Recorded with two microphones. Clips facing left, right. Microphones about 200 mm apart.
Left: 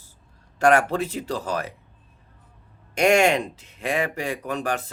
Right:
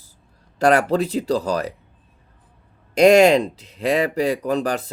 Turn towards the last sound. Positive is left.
turn(degrees=-35)  # may be behind; listen again after turning